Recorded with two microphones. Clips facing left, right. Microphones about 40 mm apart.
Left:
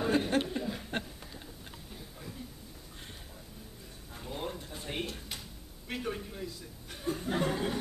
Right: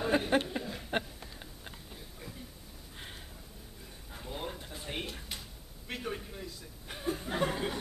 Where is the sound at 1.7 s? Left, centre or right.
Centre.